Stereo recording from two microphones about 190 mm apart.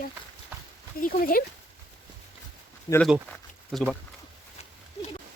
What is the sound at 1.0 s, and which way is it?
Speech, 50° left (ahead or behind).